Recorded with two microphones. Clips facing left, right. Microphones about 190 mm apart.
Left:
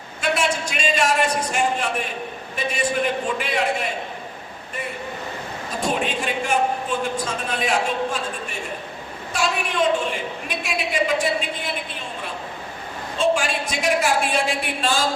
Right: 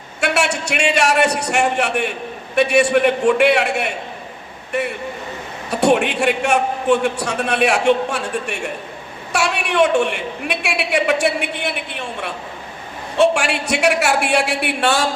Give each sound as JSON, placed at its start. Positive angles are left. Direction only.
{"t": 0.2, "sound": "a woman's voice", "side_deg": -75}